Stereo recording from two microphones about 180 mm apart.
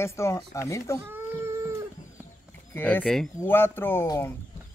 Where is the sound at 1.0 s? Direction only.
10° right (ahead or behind).